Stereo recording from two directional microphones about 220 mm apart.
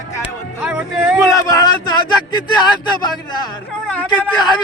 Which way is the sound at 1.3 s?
15° left (ahead or behind).